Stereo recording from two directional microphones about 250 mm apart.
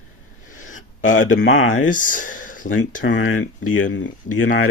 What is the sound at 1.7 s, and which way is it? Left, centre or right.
Speech, left.